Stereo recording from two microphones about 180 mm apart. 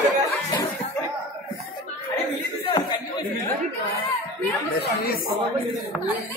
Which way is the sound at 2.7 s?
25° left (ahead or behind).